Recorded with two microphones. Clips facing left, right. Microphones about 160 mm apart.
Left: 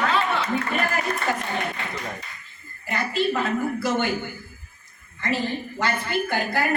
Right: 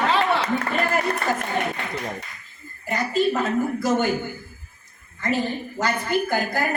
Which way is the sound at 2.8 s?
40° right (ahead or behind).